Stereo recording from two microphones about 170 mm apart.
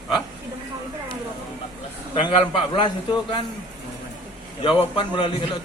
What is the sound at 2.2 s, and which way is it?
A man's voice, 30° left (ahead or behind).